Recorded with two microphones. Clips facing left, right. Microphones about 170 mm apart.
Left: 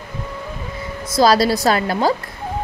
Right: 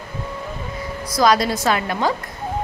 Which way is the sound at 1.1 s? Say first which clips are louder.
Left 3 dB; 30° left (ahead or behind).